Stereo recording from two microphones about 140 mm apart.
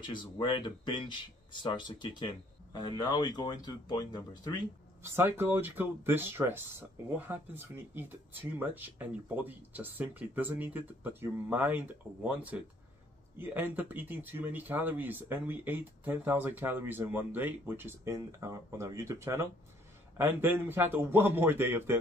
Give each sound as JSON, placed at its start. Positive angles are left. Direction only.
{"t": 0.0, "sound": "speech", "side_deg": 35}
{"t": 5.0, "sound": "speech", "side_deg": -15}